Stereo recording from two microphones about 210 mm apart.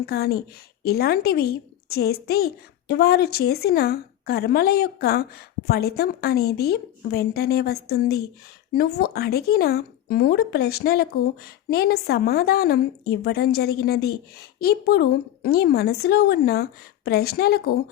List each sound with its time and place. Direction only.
0.0 s a woman's voice: 50° left (ahead or behind)